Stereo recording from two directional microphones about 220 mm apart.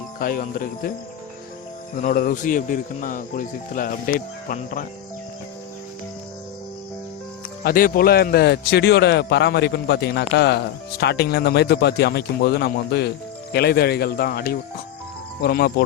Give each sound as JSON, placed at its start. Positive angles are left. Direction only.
{"t": 0.2, "sound": "speech", "side_deg": 40}
{"t": 2.0, "sound": "speech", "side_deg": 40}
{"t": 7.6, "sound": "speech", "side_deg": 40}